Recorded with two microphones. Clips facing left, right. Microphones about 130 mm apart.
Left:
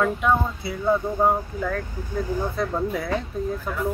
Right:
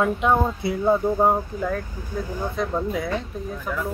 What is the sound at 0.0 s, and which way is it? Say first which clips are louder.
Speech: right 1 dB; 20° right (ahead or behind).